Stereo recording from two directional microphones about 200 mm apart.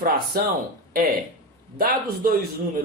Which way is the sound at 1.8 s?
45° right (ahead or behind).